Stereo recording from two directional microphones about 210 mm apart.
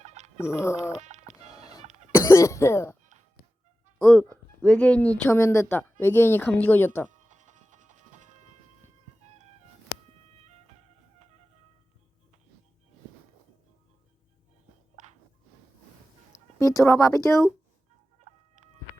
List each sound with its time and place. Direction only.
0.0 s a sound: 35° right (ahead or behind)
0.3 s speech: 10° left (ahead or behind)
0.9 s music: 35° right (ahead or behind)
1.8 s cough: 30° right (ahead or behind)
2.1 s cough: 15° left (ahead or behind)
3.9 s speech: 5° left (ahead or behind)
7.1 s music: 35° right (ahead or behind)
10.4 s music: 30° right (ahead or behind)
15.0 s a sound: 35° right (ahead or behind)
16.3 s speech: 15° left (ahead or behind)
18.3 s chicken: 35° right (ahead or behind)